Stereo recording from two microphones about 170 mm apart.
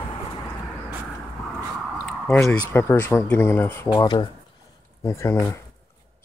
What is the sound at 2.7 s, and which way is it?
Speech, 15° left (ahead or behind).